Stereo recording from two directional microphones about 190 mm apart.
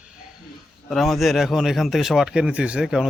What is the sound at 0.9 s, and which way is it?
A man's voice, centre (ahead or behind).